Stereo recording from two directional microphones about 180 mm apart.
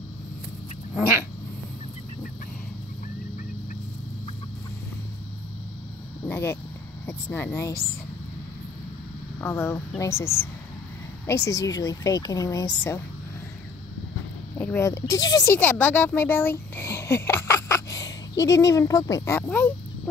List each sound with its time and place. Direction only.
6.2 s a sound: 10° left (ahead or behind)
7.1 s speech: 10° left (ahead or behind)
9.4 s speech: 15° left (ahead or behind)
14.6 s speech: 15° left (ahead or behind)